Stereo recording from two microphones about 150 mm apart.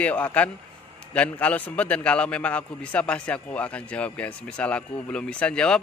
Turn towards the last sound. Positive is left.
turn(degrees=5)  # may be behind; listen again after turning